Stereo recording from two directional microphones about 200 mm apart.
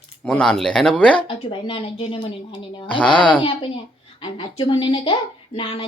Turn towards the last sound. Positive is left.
turn(degrees=25)  # may be behind; listen again after turning